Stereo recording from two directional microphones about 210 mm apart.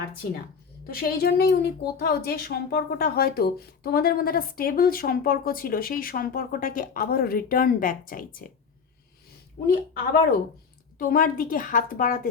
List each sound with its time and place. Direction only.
0.9 s speech: 45° left (ahead or behind)
9.6 s a woman's voice: 45° left (ahead or behind)